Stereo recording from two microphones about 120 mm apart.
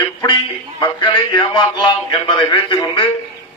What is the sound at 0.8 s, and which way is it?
A man's voice, 40° left (ahead or behind).